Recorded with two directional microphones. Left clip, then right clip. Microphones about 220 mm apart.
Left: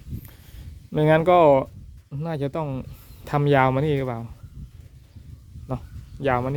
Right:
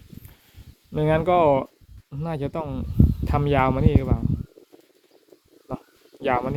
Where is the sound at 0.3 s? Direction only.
25° left (ahead or behind).